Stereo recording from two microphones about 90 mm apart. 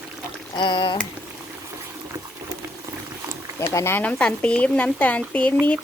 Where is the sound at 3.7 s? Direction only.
30° left (ahead or behind).